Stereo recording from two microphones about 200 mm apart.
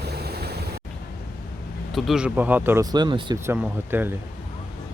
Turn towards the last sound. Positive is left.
turn(degrees=-10)  # may be behind; listen again after turning